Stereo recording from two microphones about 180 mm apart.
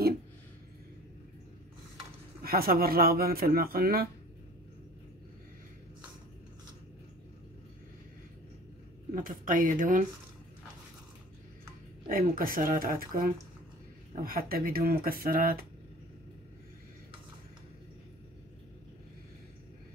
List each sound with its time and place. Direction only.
2.4 s speech: 55° right (ahead or behind)
9.1 s speech: 50° right (ahead or behind)
12.1 s speech: 50° right (ahead or behind)